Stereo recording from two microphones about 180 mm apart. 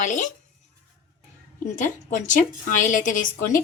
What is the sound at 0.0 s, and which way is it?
Speech, 45° left (ahead or behind).